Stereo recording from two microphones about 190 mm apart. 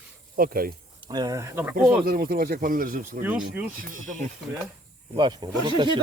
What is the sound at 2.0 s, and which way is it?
Speech, 50° right (ahead or behind).